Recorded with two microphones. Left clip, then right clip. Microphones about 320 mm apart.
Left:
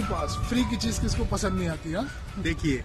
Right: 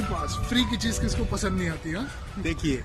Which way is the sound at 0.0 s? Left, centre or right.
Centre.